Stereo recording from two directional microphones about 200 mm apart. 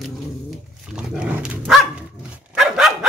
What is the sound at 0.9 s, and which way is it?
Dog, 5° right (ahead or behind).